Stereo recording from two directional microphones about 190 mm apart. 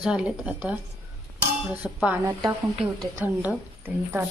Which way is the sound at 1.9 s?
10° right (ahead or behind).